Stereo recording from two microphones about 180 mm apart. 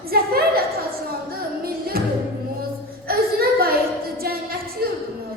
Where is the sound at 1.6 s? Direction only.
55° right (ahead or behind).